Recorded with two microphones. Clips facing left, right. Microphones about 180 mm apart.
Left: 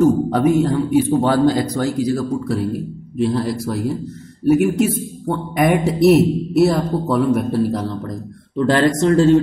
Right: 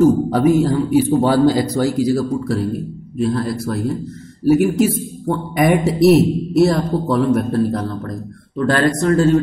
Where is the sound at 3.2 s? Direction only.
10° left (ahead or behind).